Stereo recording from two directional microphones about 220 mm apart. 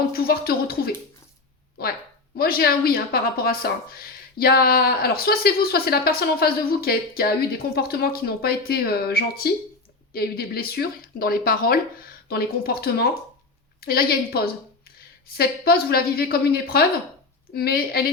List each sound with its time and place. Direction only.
0.1 s speech: 45° left (ahead or behind)